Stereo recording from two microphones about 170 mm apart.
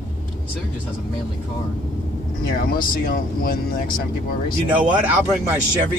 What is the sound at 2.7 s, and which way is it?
Speech, 60° left (ahead or behind).